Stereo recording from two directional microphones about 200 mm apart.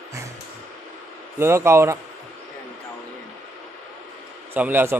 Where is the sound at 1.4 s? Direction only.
10° right (ahead or behind).